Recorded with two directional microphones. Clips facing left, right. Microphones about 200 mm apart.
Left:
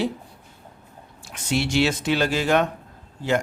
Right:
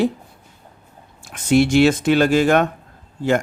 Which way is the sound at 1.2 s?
50° right (ahead or behind).